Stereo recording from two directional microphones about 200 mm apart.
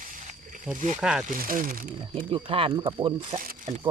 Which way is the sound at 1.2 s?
45° right (ahead or behind).